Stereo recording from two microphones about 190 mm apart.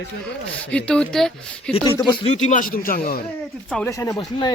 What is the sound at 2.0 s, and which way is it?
Speech, 25° left (ahead or behind).